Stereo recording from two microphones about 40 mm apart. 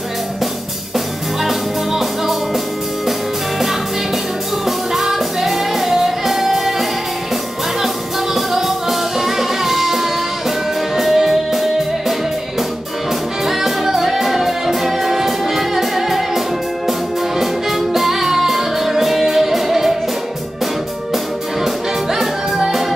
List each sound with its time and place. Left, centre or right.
0.9 s music: centre
8.4 s music: centre
13.5 s music: centre
22.1 s music: centre